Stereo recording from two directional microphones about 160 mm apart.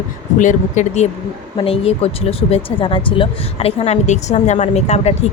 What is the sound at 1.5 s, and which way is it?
Speech, 35° left (ahead or behind).